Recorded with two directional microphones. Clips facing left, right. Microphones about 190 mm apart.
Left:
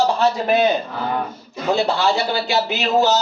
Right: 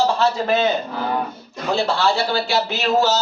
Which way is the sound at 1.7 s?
20° left (ahead or behind).